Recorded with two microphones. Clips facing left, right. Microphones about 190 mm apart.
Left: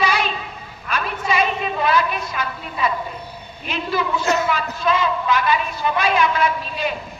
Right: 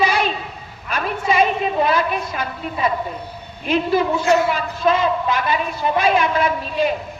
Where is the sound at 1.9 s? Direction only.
45° right (ahead or behind).